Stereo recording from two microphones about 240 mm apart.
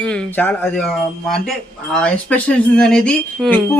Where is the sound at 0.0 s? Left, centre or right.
Centre.